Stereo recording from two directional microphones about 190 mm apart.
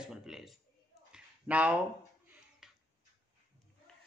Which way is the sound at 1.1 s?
5° right (ahead or behind).